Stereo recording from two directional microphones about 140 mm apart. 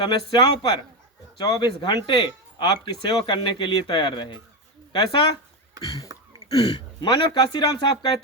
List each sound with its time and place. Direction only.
0.0 s speech: 35° left (ahead or behind)
6.1 s throat clearing: 25° right (ahead or behind)
6.5 s speech: 30° left (ahead or behind)